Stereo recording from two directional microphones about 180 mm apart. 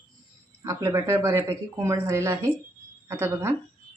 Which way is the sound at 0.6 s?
15° right (ahead or behind).